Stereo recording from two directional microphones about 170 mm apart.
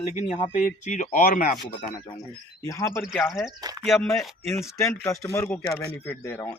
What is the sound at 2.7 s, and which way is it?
Speech, 15° left (ahead or behind).